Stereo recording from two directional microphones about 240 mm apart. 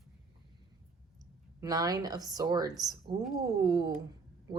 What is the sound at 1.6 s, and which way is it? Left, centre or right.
A woman's voice, centre.